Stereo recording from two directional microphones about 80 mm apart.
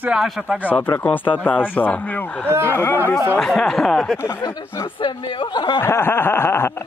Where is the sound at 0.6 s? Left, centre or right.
Left.